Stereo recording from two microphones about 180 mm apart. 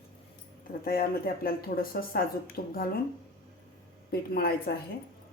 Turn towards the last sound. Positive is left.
turn(degrees=55)  # may be behind; listen again after turning